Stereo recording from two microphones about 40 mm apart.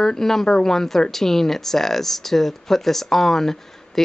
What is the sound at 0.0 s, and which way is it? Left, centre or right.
Speech, centre.